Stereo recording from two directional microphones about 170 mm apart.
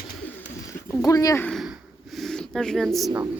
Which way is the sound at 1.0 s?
20° left (ahead or behind).